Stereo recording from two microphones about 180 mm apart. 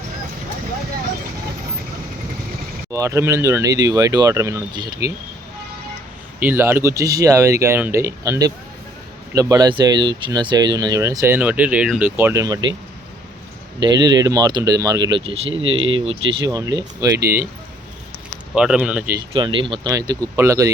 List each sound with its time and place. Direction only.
2.9 s speech: 15° right (ahead or behind)
6.4 s speech: 10° right (ahead or behind)
13.7 s speech: 25° right (ahead or behind)
15.7 s speech: 90° right
16.0 s speech: 25° right (ahead or behind)
18.5 s speech: 5° right (ahead or behind)
19.3 s speech: 30° right (ahead or behind)